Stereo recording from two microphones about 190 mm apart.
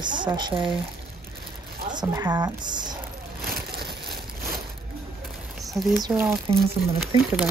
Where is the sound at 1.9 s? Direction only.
20° right (ahead or behind).